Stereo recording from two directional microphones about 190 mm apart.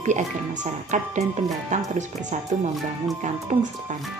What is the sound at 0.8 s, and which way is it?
A woman's voice, 40° right (ahead or behind).